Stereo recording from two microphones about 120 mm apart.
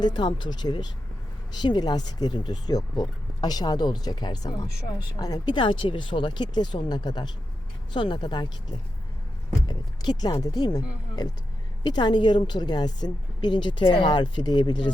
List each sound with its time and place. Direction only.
0.0 s a woman's voice: 40° left (ahead or behind)
9.6 s a woman's voice: 35° left (ahead or behind)